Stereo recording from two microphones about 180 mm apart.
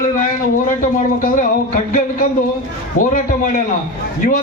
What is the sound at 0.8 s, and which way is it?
Speech, 45° left (ahead or behind).